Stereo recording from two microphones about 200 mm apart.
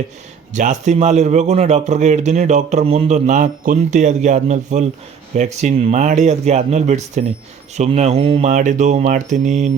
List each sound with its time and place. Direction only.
0.5 s speech: 35° right (ahead or behind)